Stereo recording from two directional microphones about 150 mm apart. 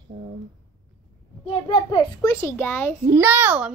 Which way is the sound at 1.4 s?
30° left (ahead or behind).